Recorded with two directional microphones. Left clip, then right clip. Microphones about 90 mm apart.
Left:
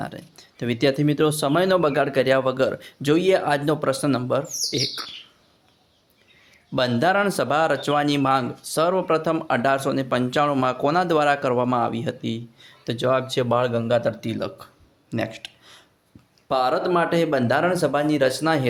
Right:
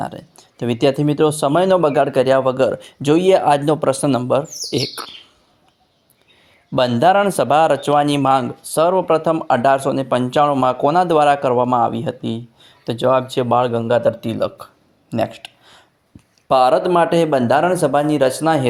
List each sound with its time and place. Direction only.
0.0 s speech: 35° right (ahead or behind)
4.7 s speech: 65° right (ahead or behind)
6.7 s speech: 35° right (ahead or behind)
15.1 s a sound: 30° right (ahead or behind)
16.5 s speech: 60° right (ahead or behind); by 18.7 s 35° right (ahead or behind)